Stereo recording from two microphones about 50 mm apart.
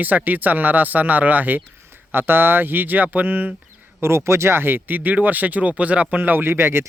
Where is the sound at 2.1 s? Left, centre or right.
Right.